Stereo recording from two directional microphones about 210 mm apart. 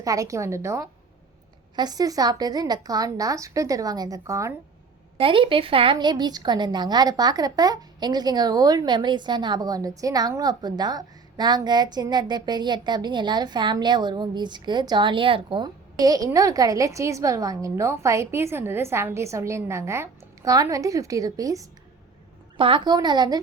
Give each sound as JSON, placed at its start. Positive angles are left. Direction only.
{"t": 0.0, "sound": "a woman's voice", "side_deg": -15}
{"t": 5.1, "sound": "speech", "side_deg": -25}